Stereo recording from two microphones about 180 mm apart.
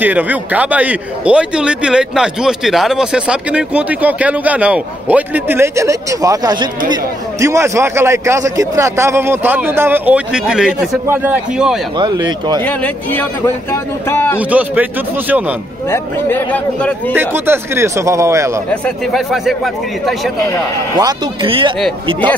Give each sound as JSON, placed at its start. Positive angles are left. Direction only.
{"t": 0.0, "sound": "a man's voice", "side_deg": -10}
{"t": 12.0, "sound": "speech", "side_deg": -25}
{"t": 12.6, "sound": "speech", "side_deg": 10}
{"t": 14.5, "sound": "a man's voice", "side_deg": -10}
{"t": 15.9, "sound": "speech", "side_deg": 10}
{"t": 17.1, "sound": "a man's voice", "side_deg": -10}
{"t": 18.7, "sound": "a man's voice", "side_deg": 0}
{"t": 21.0, "sound": "speech", "side_deg": -25}